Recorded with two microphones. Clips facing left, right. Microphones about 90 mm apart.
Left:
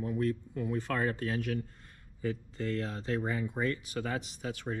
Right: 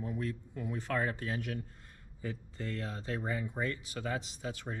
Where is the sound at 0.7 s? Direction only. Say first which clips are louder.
Left 2 dB; 50° left (ahead or behind).